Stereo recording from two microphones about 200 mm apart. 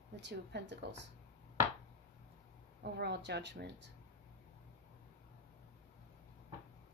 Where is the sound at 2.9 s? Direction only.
55° right (ahead or behind).